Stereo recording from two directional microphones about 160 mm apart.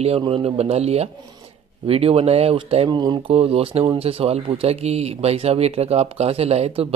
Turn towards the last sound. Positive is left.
turn(degrees=-40)  # may be behind; listen again after turning